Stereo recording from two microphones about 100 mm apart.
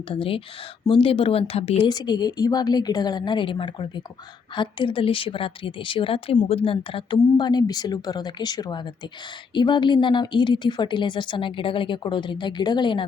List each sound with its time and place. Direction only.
0.1 s a woman's voice: 65° left (ahead or behind); by 1.9 s 85° left
1.9 s a woman's voice: 45° left (ahead or behind); by 7.2 s 65° left (ahead or behind)
7.3 s a woman's voice: 45° left (ahead or behind)